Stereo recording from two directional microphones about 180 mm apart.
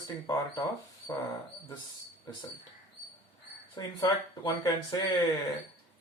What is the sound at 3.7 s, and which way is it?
Speech, 20° left (ahead or behind).